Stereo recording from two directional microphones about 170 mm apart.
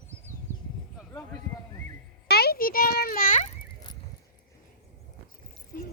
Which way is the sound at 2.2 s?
65° left (ahead or behind).